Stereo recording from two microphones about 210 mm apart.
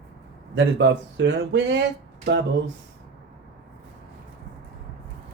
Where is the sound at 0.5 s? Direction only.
55° right (ahead or behind).